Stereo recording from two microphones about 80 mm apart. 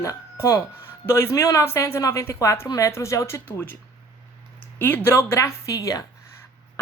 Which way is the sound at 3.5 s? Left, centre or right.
Left.